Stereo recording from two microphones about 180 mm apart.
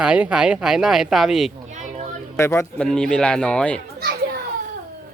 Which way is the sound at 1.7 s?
40° right (ahead or behind).